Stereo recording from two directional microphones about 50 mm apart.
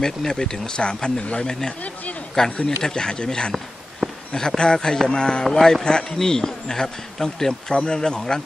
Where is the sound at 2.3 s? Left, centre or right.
Centre.